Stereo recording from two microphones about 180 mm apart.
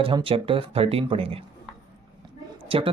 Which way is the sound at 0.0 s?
30° right (ahead or behind).